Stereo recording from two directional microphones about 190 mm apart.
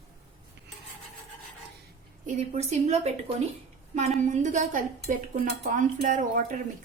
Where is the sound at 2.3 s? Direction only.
35° right (ahead or behind).